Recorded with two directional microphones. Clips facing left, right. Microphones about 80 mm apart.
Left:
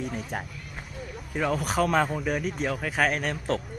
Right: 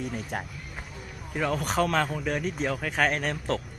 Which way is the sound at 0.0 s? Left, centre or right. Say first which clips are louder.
Even; centre.